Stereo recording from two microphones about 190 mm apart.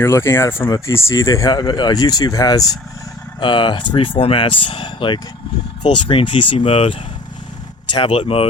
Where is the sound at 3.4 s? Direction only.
25° left (ahead or behind).